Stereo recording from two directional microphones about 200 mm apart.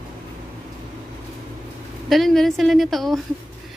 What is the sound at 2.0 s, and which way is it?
A woman's voice, centre (ahead or behind).